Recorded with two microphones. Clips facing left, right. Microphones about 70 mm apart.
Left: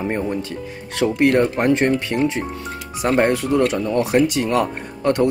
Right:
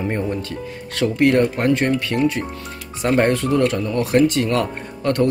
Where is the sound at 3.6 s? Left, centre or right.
Centre.